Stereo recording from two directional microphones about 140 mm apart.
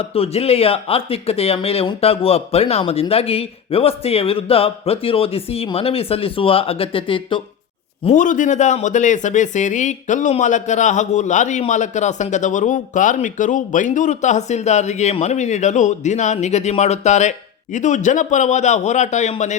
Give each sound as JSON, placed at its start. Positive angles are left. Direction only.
{"t": 0.0, "sound": "speech", "side_deg": 45}
{"t": 8.1, "sound": "speech", "side_deg": 65}